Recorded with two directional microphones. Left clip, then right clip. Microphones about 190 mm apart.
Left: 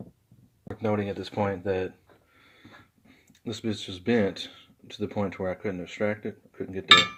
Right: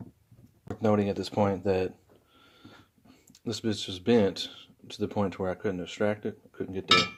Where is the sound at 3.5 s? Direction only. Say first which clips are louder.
Right 1 dB; centre (ahead or behind).